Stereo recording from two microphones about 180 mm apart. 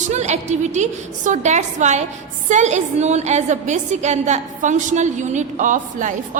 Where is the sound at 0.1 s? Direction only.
40° right (ahead or behind).